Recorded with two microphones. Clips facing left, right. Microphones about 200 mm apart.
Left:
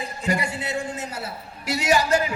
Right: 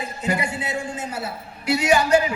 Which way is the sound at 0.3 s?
40° left (ahead or behind).